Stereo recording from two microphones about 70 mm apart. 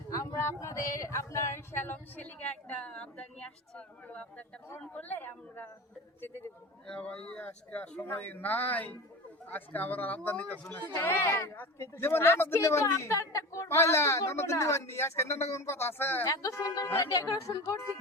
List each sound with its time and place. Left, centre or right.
0.3 s a sound: left
1.8 s a woman's voice: left
4.9 s a sound: left
6.8 s a woman's voice: centre; by 16.2 s left
16.2 s speech: left
17.1 s a woman's voice: left